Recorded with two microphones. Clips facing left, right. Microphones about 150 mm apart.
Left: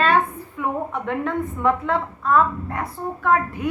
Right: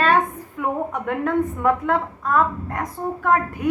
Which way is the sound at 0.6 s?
50° right (ahead or behind).